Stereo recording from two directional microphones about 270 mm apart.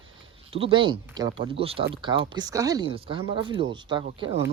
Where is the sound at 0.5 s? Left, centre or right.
Centre.